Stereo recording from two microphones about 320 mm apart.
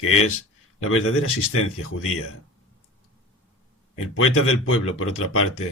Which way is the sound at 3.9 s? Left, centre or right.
Left.